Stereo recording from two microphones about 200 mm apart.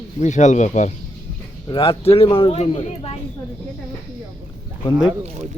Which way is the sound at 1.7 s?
25° left (ahead or behind).